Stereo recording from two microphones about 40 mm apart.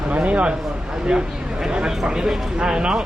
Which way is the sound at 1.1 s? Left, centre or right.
Centre.